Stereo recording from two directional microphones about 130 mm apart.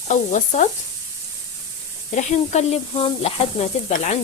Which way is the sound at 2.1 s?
65° left (ahead or behind).